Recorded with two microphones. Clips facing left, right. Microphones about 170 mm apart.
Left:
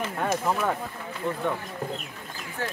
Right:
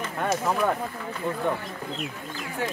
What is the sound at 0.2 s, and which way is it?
Speech, centre (ahead or behind).